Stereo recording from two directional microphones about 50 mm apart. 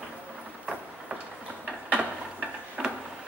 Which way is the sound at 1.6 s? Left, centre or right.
Right.